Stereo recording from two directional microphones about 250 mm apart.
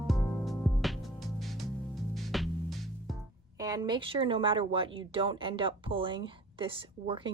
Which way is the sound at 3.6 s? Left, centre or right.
Centre.